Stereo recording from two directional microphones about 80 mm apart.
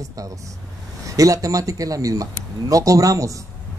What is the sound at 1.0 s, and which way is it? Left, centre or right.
A man's voice, right.